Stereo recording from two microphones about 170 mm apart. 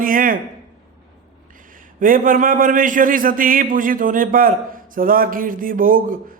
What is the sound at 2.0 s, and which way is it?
A man's voice, 55° right (ahead or behind).